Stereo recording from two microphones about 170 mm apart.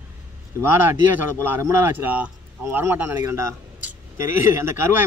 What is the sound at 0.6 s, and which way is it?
Speech, 15° right (ahead or behind).